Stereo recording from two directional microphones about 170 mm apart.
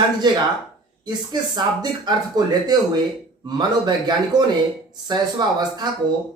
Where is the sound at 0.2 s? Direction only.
25° right (ahead or behind).